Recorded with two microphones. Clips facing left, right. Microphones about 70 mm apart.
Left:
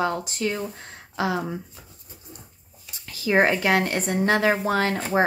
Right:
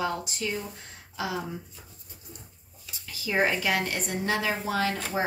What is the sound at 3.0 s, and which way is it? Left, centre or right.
A woman's voice, left.